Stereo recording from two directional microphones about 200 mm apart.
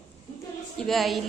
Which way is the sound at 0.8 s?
Centre (ahead or behind).